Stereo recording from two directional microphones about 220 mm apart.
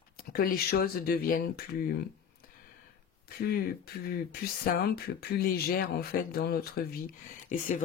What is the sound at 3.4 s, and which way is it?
Speech, 45° left (ahead or behind).